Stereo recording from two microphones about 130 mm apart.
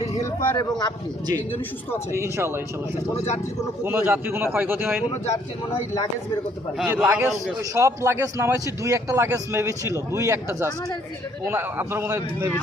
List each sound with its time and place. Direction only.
0.1 s a sound: 25° left (ahead or behind)
0.5 s speech: 30° left (ahead or behind)
2.1 s speech: 20° right (ahead or behind)
3.8 s a man's voice: 15° right (ahead or behind)
5.9 s speech: 25° left (ahead or behind)
6.8 s a man's voice: 15° right (ahead or behind)